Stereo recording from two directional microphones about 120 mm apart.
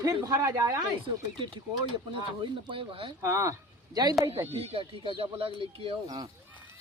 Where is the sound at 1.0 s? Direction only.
45° right (ahead or behind).